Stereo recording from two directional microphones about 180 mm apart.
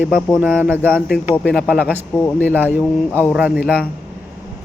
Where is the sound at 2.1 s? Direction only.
10° left (ahead or behind).